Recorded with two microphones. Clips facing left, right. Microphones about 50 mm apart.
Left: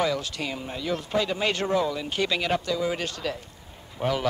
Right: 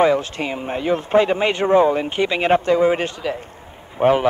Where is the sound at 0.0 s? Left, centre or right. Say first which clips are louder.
Right 10 dB; right.